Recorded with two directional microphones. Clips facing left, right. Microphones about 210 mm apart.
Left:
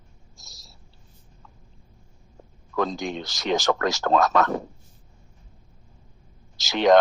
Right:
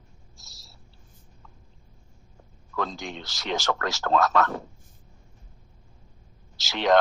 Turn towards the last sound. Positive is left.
turn(degrees=15)  # may be behind; listen again after turning